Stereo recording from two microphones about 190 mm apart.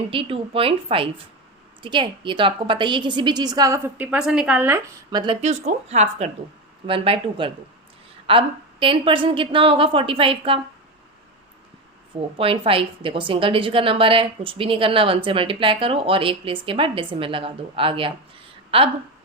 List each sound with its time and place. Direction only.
0.1 s a woman's voice: 30° right (ahead or behind); by 4.8 s 10° right (ahead or behind)
5.1 s a woman's voice: 25° right (ahead or behind)
12.1 s a woman's voice: 30° right (ahead or behind)